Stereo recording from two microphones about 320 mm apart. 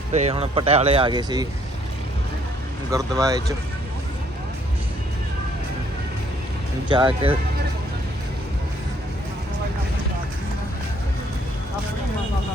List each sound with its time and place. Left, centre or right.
0.1 s speech: centre
2.9 s speech: centre
6.8 s speech: centre